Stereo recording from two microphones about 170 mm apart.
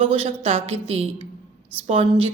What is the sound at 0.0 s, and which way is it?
A woman's voice, 35° right (ahead or behind).